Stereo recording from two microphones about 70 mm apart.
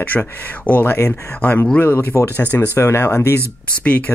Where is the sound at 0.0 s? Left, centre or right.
Left.